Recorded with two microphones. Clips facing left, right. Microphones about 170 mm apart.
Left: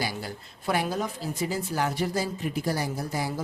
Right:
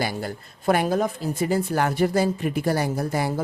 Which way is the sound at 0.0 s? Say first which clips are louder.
Right 5 dB; 50° right (ahead or behind).